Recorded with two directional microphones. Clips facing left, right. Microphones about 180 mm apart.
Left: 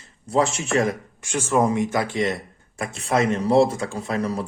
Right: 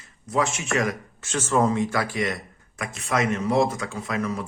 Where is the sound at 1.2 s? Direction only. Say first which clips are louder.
Left 1 dB; 15° left (ahead or behind).